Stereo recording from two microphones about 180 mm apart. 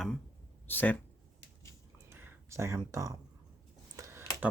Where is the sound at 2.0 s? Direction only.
10° right (ahead or behind).